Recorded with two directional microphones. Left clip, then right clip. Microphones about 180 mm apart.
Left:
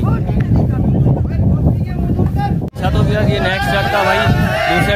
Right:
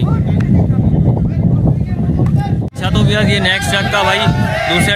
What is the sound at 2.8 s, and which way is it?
Speech, 10° right (ahead or behind).